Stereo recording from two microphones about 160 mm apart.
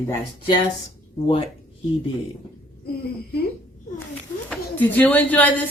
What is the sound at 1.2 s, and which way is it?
Speech, 35° left (ahead or behind).